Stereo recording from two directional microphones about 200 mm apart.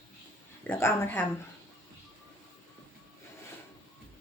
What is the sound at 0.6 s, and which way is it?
Speech, 10° left (ahead or behind).